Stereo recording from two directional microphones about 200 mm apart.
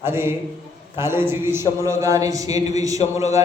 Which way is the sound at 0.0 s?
10° right (ahead or behind).